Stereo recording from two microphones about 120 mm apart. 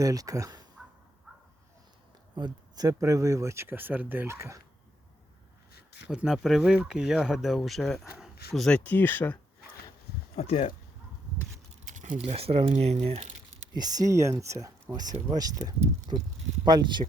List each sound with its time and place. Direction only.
0.0 s speech: 30° right (ahead or behind)
2.3 s speech: 35° right (ahead or behind)
6.1 s speech: 5° right (ahead or behind); by 9.4 s 15° left (ahead or behind)
10.3 s speech: 60° left (ahead or behind)
11.9 s a sound: 90° right
12.1 s speech: 55° right (ahead or behind)
13.7 s speech: 30° right (ahead or behind)